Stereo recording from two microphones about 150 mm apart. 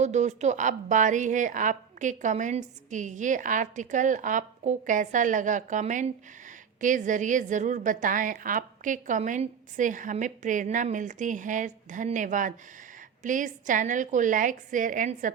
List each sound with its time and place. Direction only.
0.0 s a woman's voice: 50° right (ahead or behind)